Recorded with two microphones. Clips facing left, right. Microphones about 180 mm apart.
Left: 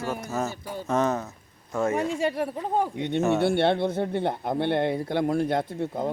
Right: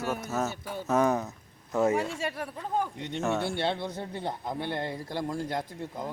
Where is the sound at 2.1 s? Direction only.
25° left (ahead or behind).